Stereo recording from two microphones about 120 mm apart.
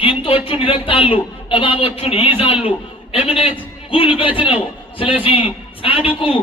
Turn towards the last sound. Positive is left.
turn(degrees=50)  # may be behind; listen again after turning